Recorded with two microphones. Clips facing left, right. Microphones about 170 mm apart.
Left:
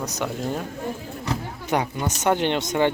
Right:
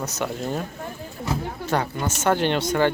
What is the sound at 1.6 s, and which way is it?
Speech, 15° left (ahead or behind).